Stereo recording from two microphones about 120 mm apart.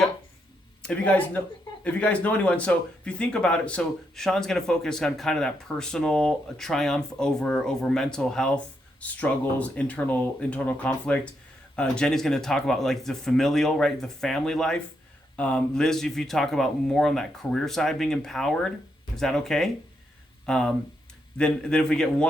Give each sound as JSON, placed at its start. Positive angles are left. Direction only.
{"t": 0.8, "sound": "speech", "side_deg": 10}